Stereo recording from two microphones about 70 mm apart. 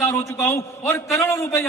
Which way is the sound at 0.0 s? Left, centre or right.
Left.